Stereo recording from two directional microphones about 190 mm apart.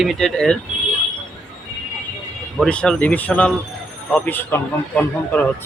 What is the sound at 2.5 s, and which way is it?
Speech, 5° left (ahead or behind).